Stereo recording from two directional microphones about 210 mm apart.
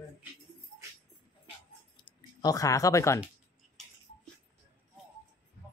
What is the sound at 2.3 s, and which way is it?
Speech, 15° left (ahead or behind).